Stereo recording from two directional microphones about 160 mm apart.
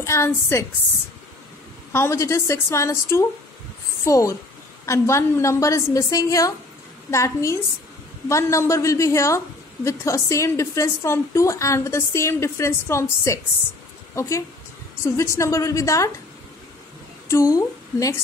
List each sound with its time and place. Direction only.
0.0 s a woman's voice: 15° left (ahead or behind)
1.9 s a woman's voice: 15° left (ahead or behind)
15.1 s a woman's voice: 20° left (ahead or behind)
17.3 s a woman's voice: 20° left (ahead or behind)